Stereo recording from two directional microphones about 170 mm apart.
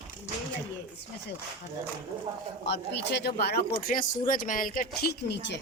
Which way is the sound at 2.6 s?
90° left.